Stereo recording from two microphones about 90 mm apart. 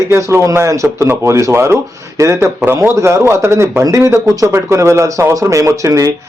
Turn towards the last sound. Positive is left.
turn(degrees=-35)  # may be behind; listen again after turning